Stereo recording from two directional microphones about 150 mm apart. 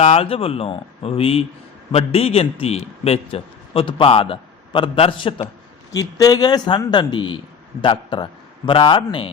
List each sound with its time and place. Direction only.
0.0 s a man's voice: 40° left (ahead or behind)
5.9 s a man's voice: 25° left (ahead or behind)